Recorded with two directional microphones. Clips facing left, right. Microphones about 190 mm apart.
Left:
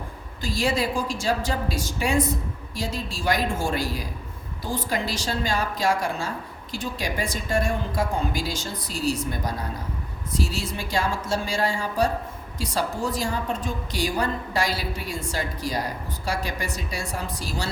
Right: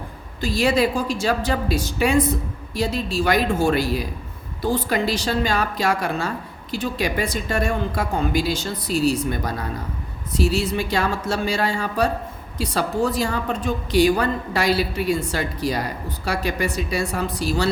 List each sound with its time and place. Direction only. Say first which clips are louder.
0.4 s a woman's voice: right 5 dB; 65° right (ahead or behind)